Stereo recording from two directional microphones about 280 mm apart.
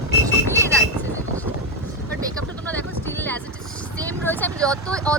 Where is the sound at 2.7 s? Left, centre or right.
Centre.